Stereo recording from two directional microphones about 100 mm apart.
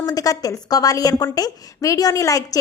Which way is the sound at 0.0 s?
40° left (ahead or behind).